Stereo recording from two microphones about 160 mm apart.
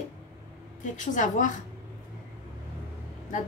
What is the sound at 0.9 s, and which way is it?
Speech, 50° left (ahead or behind).